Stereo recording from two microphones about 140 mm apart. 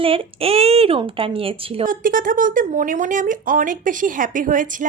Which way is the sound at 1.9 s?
80° right.